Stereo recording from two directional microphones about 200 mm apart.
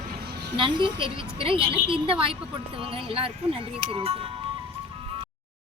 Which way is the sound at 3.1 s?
25° right (ahead or behind).